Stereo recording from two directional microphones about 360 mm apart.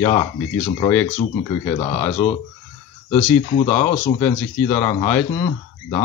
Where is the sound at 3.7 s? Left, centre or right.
Centre.